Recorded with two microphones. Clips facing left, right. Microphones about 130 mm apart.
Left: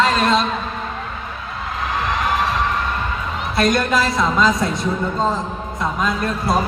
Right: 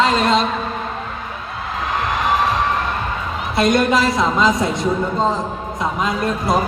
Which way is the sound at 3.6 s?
20° right (ahead or behind).